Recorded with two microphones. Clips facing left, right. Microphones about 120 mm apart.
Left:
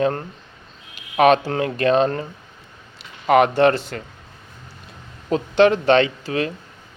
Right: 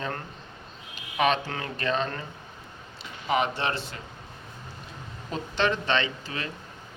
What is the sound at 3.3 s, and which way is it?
Speech, 60° left (ahead or behind).